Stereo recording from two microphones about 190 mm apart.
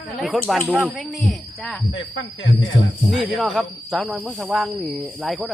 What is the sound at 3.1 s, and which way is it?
Speech, centre (ahead or behind).